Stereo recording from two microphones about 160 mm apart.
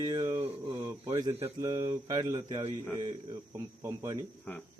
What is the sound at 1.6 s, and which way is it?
A man's voice, 20° right (ahead or behind).